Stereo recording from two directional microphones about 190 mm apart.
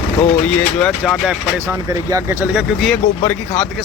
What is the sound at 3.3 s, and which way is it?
Speech, 10° left (ahead or behind).